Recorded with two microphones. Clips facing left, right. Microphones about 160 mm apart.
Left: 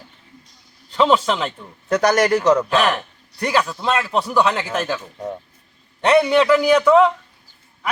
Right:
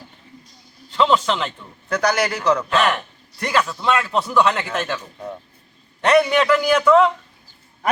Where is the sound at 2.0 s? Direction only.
25° left (ahead or behind).